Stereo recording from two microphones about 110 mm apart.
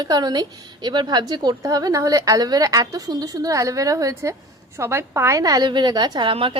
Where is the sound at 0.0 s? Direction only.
40° right (ahead or behind).